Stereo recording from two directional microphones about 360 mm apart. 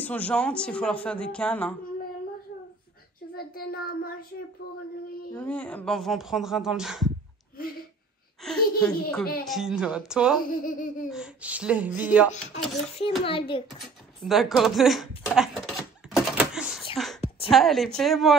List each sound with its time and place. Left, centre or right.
0.0 s a woman's voice: centre
3.3 s a child's voice: left
5.3 s a woman's voice: centre
8.4 s a woman's voice: centre
10.5 s a child's voice: left
11.1 s a woman's voice: centre
13.2 s a child's voice: centre
13.7 s speech: centre
16.9 s whispering: centre
17.5 s a woman's voice: centre